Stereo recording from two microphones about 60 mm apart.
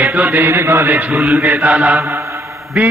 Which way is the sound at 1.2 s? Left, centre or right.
Right.